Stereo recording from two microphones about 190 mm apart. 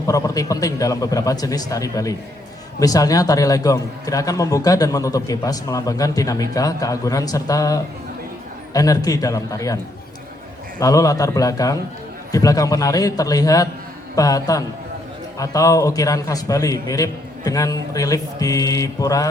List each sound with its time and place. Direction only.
0.1 s a man's voice: 20° left (ahead or behind)
10.8 s a man's voice: 20° left (ahead or behind)